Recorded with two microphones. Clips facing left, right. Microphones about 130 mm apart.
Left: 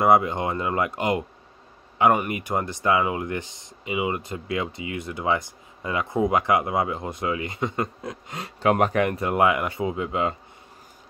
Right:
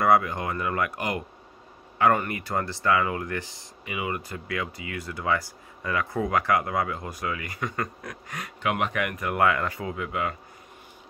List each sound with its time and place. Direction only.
0.0 s speech: 20° left (ahead or behind)